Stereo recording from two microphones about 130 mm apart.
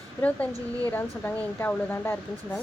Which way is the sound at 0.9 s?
15° left (ahead or behind).